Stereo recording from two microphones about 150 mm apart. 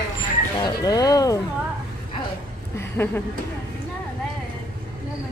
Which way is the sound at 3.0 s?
15° left (ahead or behind).